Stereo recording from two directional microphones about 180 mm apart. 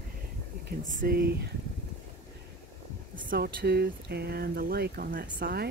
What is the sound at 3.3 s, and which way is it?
Speech, 60° right (ahead or behind).